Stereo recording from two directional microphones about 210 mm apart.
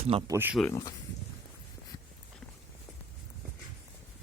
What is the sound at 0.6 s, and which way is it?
Speech, 10° left (ahead or behind).